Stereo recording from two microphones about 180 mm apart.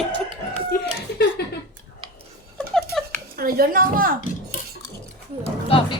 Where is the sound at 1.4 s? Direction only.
60° left (ahead or behind).